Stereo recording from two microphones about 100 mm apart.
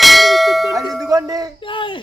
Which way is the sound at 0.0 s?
Centre (ahead or behind).